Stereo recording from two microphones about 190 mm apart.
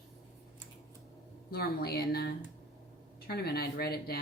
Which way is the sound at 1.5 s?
55° left (ahead or behind).